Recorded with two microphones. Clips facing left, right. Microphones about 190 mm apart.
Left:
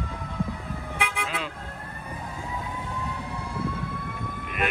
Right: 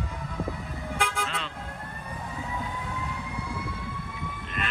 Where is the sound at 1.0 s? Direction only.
Centre (ahead or behind).